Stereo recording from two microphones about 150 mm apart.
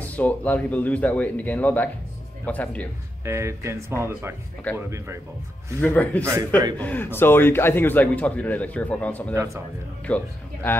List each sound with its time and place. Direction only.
0.0 s a man's voice: 10° left (ahead or behind)
3.3 s speech: 20° right (ahead or behind)
5.8 s a man's voice: 10° left (ahead or behind)
9.3 s speech: 20° right (ahead or behind)
10.0 s a man's voice: 10° left (ahead or behind)